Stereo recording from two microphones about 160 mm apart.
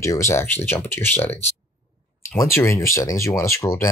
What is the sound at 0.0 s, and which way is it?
Speech, 15° left (ahead or behind).